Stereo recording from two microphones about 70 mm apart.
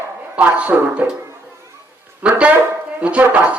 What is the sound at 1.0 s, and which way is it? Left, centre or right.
Speech, right.